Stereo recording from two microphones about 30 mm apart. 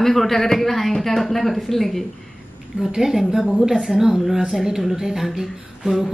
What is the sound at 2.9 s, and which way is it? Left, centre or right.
Speech, centre.